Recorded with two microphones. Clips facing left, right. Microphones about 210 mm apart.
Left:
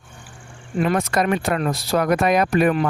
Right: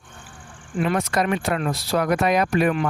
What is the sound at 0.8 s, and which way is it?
Speech, 45° left (ahead or behind).